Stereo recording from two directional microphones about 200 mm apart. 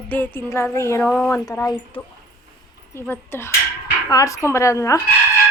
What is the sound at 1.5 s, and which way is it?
Speech, 20° left (ahead or behind).